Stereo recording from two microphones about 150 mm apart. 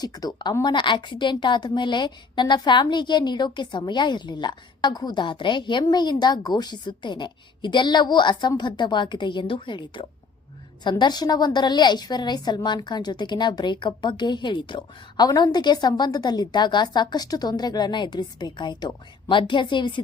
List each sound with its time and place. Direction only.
0.0 s a woman's voice: 25° left (ahead or behind)